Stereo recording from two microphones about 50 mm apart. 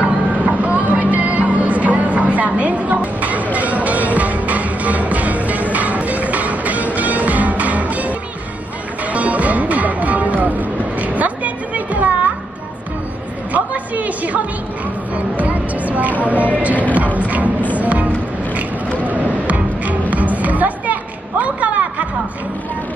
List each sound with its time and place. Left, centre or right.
0.0 s music: right
9.1 s music: right
13.5 s a sound: right
15.1 s music: right
19.0 s music: right